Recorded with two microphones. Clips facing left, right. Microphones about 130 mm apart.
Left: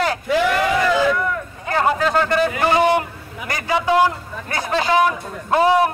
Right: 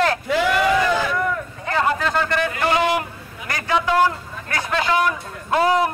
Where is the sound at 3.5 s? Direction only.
15° left (ahead or behind).